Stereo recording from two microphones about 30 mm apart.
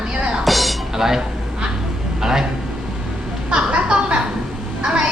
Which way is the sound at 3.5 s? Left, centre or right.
Right.